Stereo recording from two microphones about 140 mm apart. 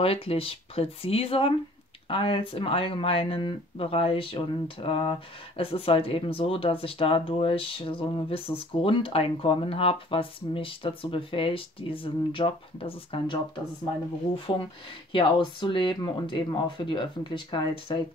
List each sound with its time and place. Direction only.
0.0 s speech: 45° left (ahead or behind)